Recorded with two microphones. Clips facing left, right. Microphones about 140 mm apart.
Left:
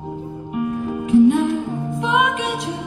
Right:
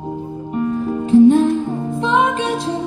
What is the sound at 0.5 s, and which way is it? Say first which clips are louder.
Music: right 3 dB; 35° right (ahead or behind).